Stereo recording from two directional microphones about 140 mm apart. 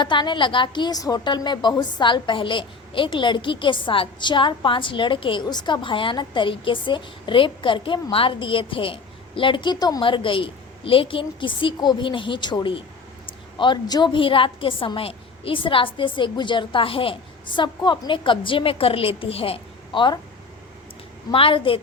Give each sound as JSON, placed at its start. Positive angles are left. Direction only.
{"t": 0.0, "sound": "a woman's voice", "side_deg": 35}
{"t": 21.3, "sound": "a woman's voice", "side_deg": 40}